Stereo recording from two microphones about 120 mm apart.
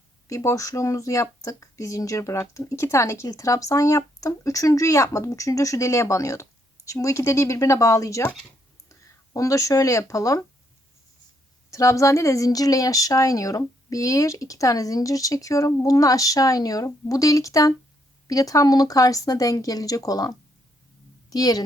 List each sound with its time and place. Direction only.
0.3 s speech: 25° left (ahead or behind)
11.7 s a woman's voice: 25° left (ahead or behind)